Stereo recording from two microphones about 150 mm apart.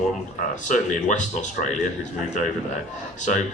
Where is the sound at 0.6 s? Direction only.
55° left (ahead or behind).